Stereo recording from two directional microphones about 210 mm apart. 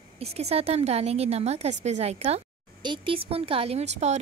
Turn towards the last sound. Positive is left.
turn(degrees=-30)  # may be behind; listen again after turning